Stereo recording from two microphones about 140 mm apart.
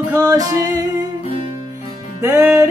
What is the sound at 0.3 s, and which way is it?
Music, 25° right (ahead or behind).